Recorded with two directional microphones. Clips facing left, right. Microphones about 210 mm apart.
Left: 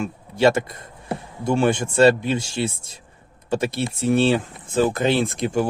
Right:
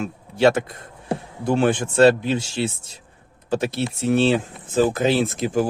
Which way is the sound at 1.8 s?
5° left (ahead or behind).